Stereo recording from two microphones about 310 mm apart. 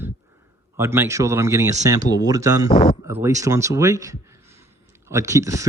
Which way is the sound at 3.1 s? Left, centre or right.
Centre.